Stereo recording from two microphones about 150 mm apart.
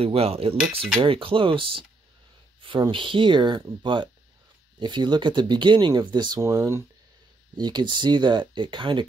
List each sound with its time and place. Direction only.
0.0 s speech: 40° right (ahead or behind)